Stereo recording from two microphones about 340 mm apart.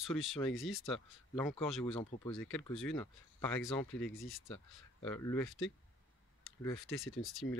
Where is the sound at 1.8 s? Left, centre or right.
Centre.